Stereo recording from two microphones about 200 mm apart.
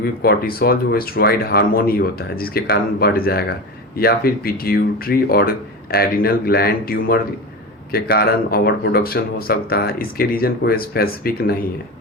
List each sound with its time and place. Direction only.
0.0 s speech: 50° left (ahead or behind)